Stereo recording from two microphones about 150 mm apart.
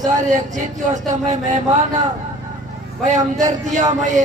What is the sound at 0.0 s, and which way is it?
Speech, 55° right (ahead or behind).